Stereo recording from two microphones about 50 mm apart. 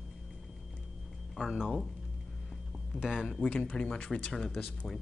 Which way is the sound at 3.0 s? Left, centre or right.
Centre.